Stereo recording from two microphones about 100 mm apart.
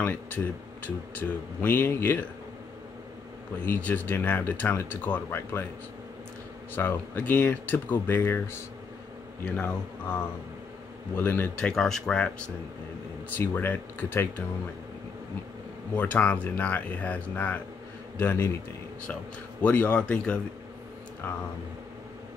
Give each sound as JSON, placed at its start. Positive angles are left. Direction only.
{"t": 0.0, "sound": "speech", "side_deg": 20}
{"t": 1.6, "sound": "speech", "side_deg": 20}
{"t": 3.6, "sound": "speech", "side_deg": 20}
{"t": 6.7, "sound": "speech", "side_deg": 20}
{"t": 11.5, "sound": "speech", "side_deg": 5}
{"t": 13.3, "sound": "speech", "side_deg": 20}
{"t": 15.9, "sound": "speech", "side_deg": 15}
{"t": 19.6, "sound": "speech", "side_deg": 15}
{"t": 21.2, "sound": "speech", "side_deg": 25}